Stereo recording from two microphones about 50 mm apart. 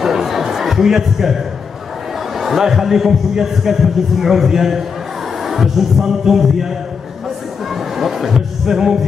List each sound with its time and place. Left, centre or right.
0.0 s music: centre
2.3 s a man's voice: centre
7.7 s speech: centre